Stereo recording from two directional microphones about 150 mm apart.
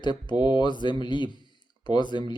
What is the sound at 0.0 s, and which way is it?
Speech, 30° left (ahead or behind).